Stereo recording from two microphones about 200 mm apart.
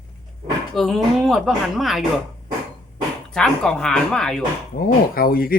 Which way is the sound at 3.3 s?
5° left (ahead or behind).